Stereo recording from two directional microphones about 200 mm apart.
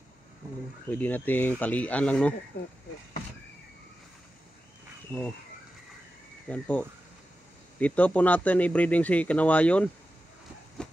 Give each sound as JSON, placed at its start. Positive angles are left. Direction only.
{"t": 0.8, "sound": "speech", "side_deg": 10}
{"t": 2.5, "sound": "speech", "side_deg": 60}
{"t": 5.1, "sound": "speech", "side_deg": 10}
{"t": 6.5, "sound": "speech", "side_deg": 5}
{"t": 10.8, "sound": "train", "side_deg": 5}